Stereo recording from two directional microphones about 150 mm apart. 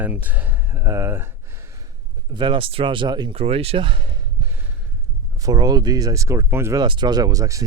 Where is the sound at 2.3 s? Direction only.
30° right (ahead or behind).